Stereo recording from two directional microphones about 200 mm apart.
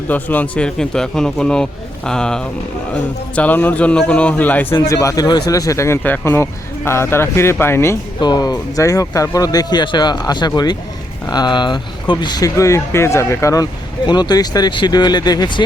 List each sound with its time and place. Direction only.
0.1 s a man's voice: 10° left (ahead or behind)